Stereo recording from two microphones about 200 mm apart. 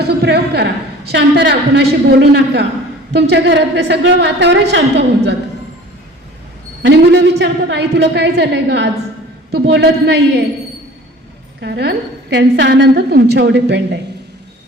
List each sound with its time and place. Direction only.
0.0 s a woman's voice: 55° right (ahead or behind)
6.8 s a woman's voice: 55° right (ahead or behind)
11.6 s a woman's voice: 55° right (ahead or behind)